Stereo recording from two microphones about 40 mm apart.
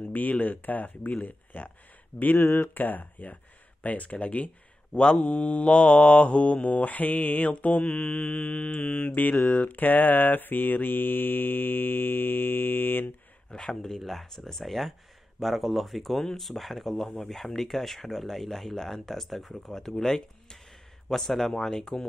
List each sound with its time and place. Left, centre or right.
0.1 s speech: left
2.3 s speech: left
2.7 s speech: left
3.8 s mantra: left
13.5 s speech: centre